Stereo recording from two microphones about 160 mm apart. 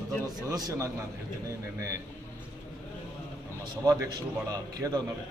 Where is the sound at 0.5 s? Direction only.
20° right (ahead or behind).